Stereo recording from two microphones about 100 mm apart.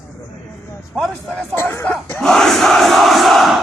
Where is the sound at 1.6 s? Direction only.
25° left (ahead or behind).